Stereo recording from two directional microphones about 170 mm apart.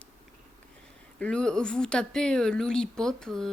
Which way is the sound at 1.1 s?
5° left (ahead or behind).